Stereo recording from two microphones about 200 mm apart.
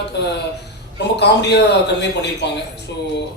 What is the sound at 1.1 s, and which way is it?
A man's voice, 55° left (ahead or behind).